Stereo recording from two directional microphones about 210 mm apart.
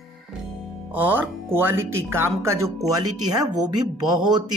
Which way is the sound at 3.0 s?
90° right.